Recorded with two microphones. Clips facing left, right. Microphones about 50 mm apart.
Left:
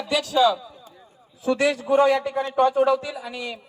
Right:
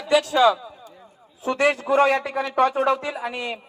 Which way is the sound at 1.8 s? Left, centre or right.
Right.